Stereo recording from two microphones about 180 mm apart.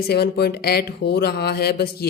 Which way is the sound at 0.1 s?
65° left (ahead or behind).